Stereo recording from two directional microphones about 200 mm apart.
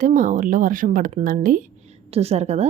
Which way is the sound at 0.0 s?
40° right (ahead or behind).